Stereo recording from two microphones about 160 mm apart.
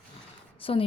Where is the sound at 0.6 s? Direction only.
35° left (ahead or behind).